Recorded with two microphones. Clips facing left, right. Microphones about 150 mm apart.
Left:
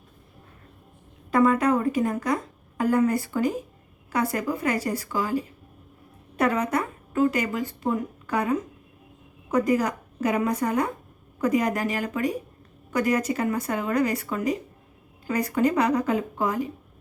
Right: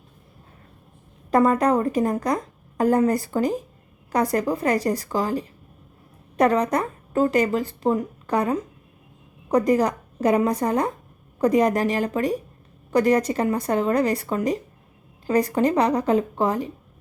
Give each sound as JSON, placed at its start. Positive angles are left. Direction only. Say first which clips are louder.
{"t": 1.3, "sound": "a woman's voice", "louder": "right 2 dB", "side_deg": -40}